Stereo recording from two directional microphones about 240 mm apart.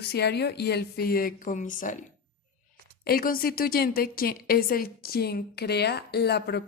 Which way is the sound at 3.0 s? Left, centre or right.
Left.